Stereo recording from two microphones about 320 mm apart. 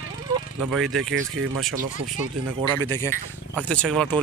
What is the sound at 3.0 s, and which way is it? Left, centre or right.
Speech, centre.